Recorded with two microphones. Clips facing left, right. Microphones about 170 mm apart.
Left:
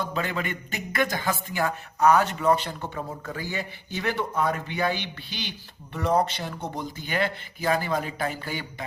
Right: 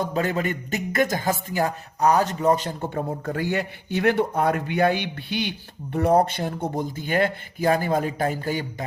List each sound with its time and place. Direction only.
0.0 s speech: 45° right (ahead or behind)